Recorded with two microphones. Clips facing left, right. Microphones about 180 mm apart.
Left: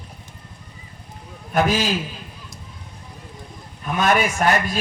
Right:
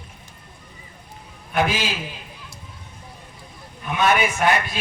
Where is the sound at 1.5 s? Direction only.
40° left (ahead or behind).